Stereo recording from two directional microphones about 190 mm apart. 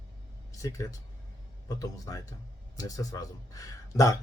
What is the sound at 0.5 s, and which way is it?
A man's voice, 15° left (ahead or behind).